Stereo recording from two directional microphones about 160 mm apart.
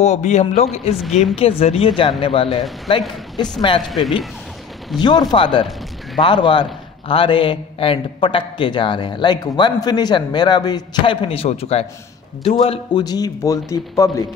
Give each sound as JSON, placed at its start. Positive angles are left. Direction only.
{"t": 0.0, "sound": "a man's voice", "side_deg": 45}
{"t": 5.0, "sound": "a man's voice", "side_deg": 25}
{"t": 13.0, "sound": "a man's voice", "side_deg": 25}